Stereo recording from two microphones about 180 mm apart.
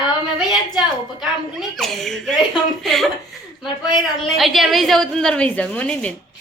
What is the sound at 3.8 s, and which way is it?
Speech, 25° left (ahead or behind).